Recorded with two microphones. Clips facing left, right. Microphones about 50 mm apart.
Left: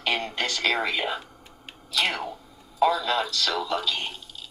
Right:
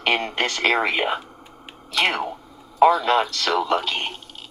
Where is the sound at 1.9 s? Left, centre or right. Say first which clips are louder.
Right 5 dB; right.